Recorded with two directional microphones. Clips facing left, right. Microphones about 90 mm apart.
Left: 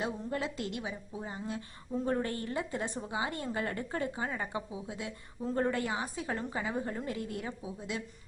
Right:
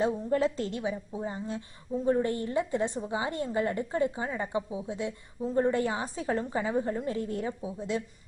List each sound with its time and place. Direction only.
0.0 s a woman's voice: 35° right (ahead or behind); by 5.8 s 15° right (ahead or behind)
5.8 s a woman's voice: 30° right (ahead or behind)